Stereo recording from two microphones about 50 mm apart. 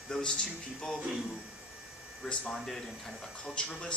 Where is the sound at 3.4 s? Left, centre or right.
Centre.